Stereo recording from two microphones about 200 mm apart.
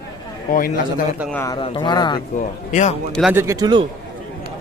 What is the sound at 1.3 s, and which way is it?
Speech, 15° left (ahead or behind).